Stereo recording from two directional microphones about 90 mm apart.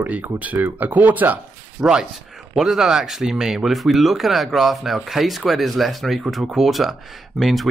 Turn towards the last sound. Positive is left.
turn(degrees=0)  # may be behind; listen again after turning